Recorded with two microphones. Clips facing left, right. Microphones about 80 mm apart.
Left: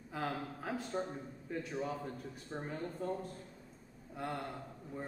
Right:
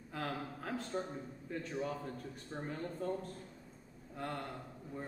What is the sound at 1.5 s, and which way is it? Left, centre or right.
A man's voice, centre.